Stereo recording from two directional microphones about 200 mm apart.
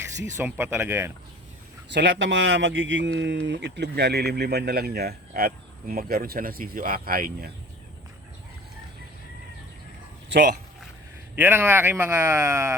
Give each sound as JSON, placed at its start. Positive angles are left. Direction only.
{"t": 0.2, "sound": "speech", "side_deg": -15}
{"t": 1.9, "sound": "speech", "side_deg": -60}
{"t": 11.3, "sound": "speech", "side_deg": -10}